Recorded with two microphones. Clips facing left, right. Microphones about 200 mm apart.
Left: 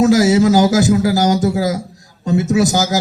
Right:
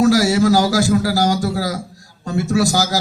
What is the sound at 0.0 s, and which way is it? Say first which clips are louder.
A man's voice: left 3 dB; 20° left (ahead or behind).